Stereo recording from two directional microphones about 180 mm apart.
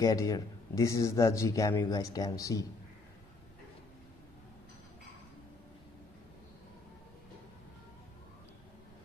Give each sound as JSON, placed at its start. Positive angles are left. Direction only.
{"t": 0.0, "sound": "speech", "side_deg": 20}